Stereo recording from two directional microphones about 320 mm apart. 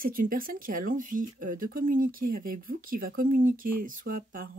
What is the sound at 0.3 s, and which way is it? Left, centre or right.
Speech, right.